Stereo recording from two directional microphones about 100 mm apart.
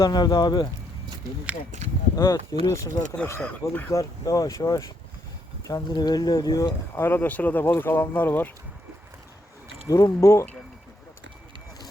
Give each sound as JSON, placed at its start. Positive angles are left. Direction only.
{"t": 0.0, "sound": "speech", "side_deg": 40}
{"t": 2.1, "sound": "speech", "side_deg": 35}
{"t": 6.9, "sound": "speech", "side_deg": 20}
{"t": 9.9, "sound": "speech", "side_deg": 30}